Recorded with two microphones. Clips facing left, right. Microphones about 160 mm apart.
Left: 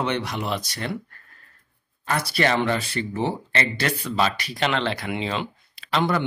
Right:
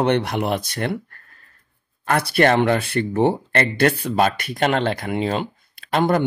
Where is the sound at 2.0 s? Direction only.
55° right (ahead or behind).